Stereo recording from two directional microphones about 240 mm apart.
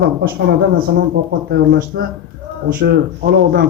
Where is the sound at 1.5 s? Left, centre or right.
Right.